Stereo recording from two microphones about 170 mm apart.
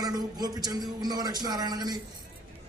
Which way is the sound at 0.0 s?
20° right (ahead or behind).